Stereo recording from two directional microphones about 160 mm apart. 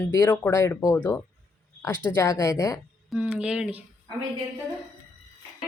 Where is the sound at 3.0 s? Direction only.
5° right (ahead or behind).